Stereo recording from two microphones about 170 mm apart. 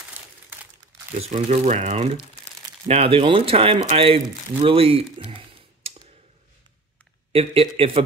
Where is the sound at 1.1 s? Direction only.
40° right (ahead or behind).